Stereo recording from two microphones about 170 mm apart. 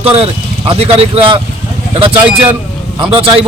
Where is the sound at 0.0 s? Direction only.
35° right (ahead or behind).